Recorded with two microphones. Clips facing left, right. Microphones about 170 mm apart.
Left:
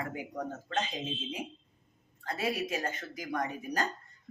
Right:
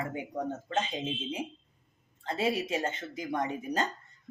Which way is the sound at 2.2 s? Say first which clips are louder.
Right 3 dB; 25° right (ahead or behind).